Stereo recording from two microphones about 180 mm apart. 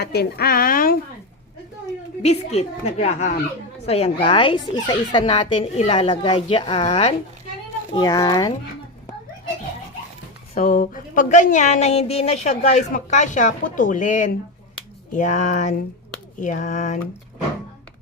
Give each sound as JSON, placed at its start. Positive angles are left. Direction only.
{"t": 0.0, "sound": "a woman's voice", "side_deg": 65}
{"t": 2.2, "sound": "speech", "side_deg": 35}
{"t": 7.9, "sound": "speech", "side_deg": 20}
{"t": 10.5, "sound": "a woman's voice", "side_deg": 45}